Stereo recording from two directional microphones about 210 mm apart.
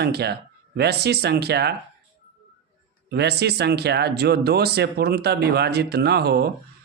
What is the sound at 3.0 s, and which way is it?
Speech, 50° right (ahead or behind).